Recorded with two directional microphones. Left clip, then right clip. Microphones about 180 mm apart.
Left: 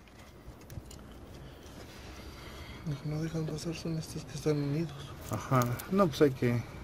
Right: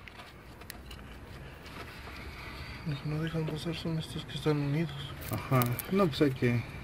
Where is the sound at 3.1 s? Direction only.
40° left (ahead or behind).